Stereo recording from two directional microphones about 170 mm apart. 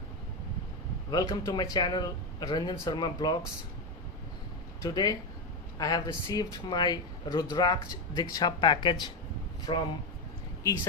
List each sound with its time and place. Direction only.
1.1 s speech: 20° left (ahead or behind)
4.8 s speech: 20° left (ahead or behind)